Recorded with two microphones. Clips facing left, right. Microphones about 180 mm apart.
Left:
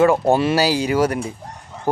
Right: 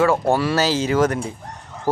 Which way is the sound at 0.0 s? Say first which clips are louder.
Left 3 dB; 20° left (ahead or behind).